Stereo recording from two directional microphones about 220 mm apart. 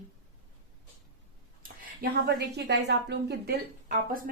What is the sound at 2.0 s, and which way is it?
A woman's voice, 50° right (ahead or behind).